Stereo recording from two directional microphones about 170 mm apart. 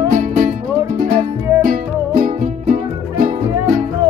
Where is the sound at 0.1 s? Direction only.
50° right (ahead or behind).